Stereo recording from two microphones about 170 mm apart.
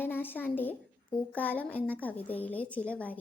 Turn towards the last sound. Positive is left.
turn(degrees=10)  # may be behind; listen again after turning